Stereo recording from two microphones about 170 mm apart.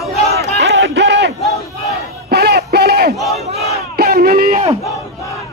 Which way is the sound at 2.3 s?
70° right (ahead or behind).